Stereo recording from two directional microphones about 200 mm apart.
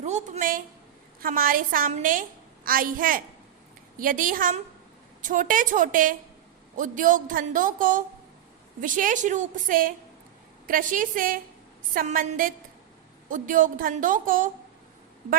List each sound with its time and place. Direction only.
0.0 s a woman's voice: 35° right (ahead or behind)